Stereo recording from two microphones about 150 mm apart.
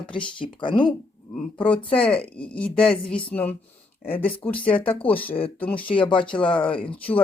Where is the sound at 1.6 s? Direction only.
10° left (ahead or behind).